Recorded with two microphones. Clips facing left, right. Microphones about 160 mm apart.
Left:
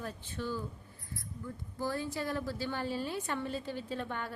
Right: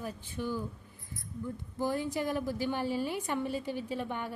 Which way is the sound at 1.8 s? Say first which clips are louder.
Right 4 dB; 15° right (ahead or behind).